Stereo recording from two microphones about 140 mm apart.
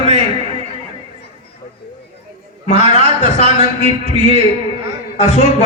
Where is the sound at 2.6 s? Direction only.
50° left (ahead or behind).